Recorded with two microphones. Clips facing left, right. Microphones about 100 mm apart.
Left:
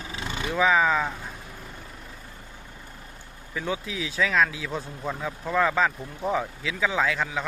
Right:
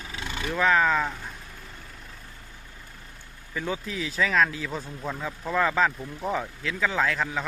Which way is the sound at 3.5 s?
Centre (ahead or behind).